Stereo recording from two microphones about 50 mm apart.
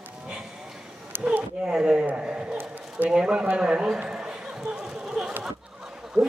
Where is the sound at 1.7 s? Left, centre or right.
Centre.